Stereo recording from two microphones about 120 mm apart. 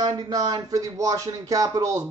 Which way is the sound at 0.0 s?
35° right (ahead or behind).